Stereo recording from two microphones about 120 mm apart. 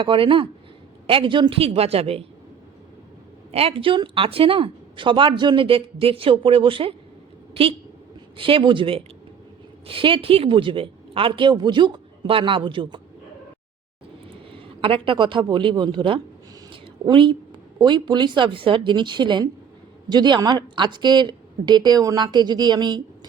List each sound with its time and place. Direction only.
0.0 s speech: 45° right (ahead or behind)
3.5 s speech: 55° right (ahead or behind)
14.5 s speech: 50° right (ahead or behind)
16.6 s a sound: 45° right (ahead or behind)
17.7 s speech: 40° right (ahead or behind)